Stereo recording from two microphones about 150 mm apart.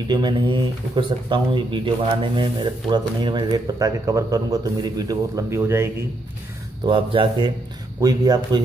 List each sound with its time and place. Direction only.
0.1 s speech: 30° right (ahead or behind)
6.9 s speech: 35° right (ahead or behind)